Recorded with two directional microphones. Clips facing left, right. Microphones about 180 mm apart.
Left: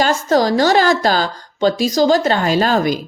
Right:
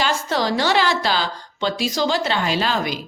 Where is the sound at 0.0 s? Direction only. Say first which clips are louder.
Left 7 dB; 45° left (ahead or behind).